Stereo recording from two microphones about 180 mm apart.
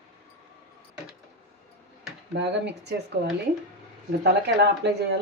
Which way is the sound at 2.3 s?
70° right (ahead or behind).